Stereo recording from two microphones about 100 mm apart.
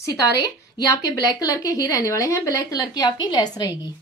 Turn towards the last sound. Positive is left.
turn(degrees=45)  # may be behind; listen again after turning